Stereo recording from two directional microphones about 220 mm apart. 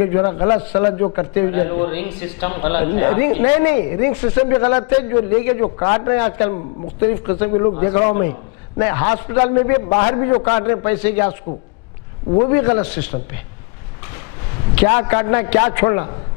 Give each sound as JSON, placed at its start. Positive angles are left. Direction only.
{"t": 0.0, "sound": "a man's voice", "side_deg": 15}
{"t": 9.8, "sound": "a man's voice", "side_deg": 25}
{"t": 12.4, "sound": "a man's voice", "side_deg": 10}
{"t": 14.9, "sound": "a man's voice", "side_deg": 20}